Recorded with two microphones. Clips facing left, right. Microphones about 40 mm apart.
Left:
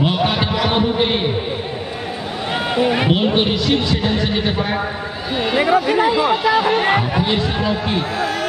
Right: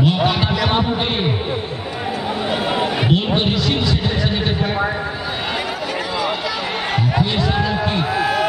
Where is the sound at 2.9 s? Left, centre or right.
Centre.